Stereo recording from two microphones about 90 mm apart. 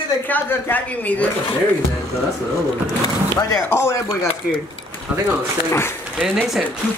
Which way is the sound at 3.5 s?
30° left (ahead or behind).